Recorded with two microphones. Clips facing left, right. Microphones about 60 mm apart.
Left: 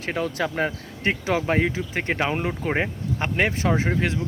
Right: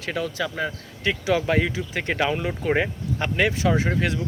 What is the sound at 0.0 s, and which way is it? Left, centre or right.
Speech, left.